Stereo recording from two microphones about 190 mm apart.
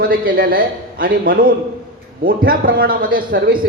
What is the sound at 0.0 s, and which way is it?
A man's voice, 50° right (ahead or behind).